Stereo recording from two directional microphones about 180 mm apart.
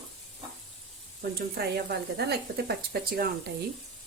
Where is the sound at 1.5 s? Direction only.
65° right (ahead or behind).